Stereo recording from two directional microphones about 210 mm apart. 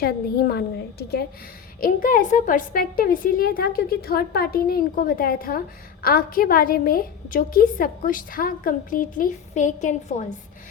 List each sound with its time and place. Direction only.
0.0 s a woman's voice: 45° left (ahead or behind)